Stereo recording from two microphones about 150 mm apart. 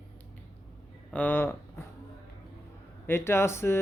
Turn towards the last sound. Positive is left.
turn(degrees=15)  # may be behind; listen again after turning